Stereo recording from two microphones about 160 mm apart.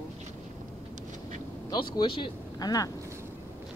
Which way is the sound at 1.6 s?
30° left (ahead or behind).